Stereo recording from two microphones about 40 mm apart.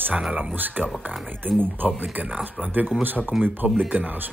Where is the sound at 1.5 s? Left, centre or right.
Right.